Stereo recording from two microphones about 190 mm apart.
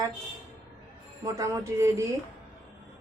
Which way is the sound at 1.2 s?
15° right (ahead or behind).